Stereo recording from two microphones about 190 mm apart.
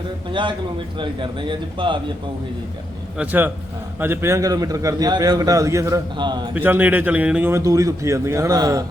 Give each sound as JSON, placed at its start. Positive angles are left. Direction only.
{"t": 0.3, "sound": "speech", "side_deg": -25}
{"t": 3.2, "sound": "a man's voice", "side_deg": -10}
{"t": 6.5, "sound": "a man's voice", "side_deg": -10}